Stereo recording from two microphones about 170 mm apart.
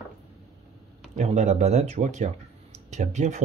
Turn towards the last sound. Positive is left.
turn(degrees=-45)  # may be behind; listen again after turning